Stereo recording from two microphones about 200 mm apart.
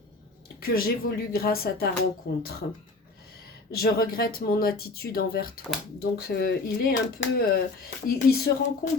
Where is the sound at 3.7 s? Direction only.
50° left (ahead or behind).